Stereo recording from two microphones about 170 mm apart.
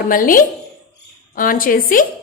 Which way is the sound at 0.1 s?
55° left (ahead or behind).